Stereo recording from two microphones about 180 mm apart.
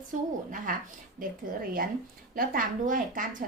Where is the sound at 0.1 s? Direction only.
45° right (ahead or behind).